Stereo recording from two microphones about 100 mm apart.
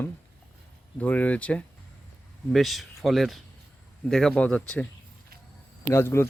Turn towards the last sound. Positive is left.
turn(degrees=25)  # may be behind; listen again after turning